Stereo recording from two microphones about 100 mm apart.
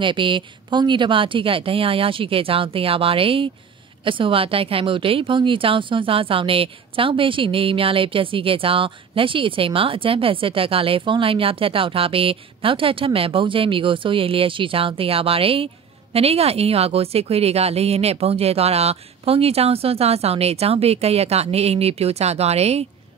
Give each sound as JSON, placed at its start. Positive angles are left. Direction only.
{"t": 0.0, "sound": "a woman's voice", "side_deg": -55}